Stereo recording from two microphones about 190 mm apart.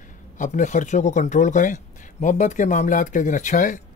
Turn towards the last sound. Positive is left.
turn(degrees=45)  # may be behind; listen again after turning